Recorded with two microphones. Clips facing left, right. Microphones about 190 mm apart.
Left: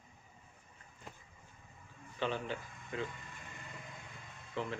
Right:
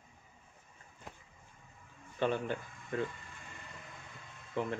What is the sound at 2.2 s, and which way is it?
Speech, 50° right (ahead or behind).